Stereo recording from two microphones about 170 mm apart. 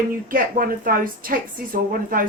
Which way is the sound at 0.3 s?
55° right (ahead or behind).